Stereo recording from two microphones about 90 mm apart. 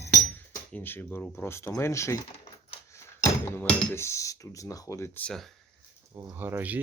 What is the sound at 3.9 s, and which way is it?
Speech, 30° left (ahead or behind).